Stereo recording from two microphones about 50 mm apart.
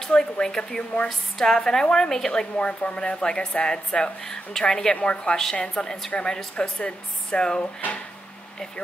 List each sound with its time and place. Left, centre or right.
0.0 s speech: centre